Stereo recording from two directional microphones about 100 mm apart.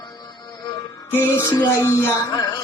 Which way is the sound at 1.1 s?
25° left (ahead or behind).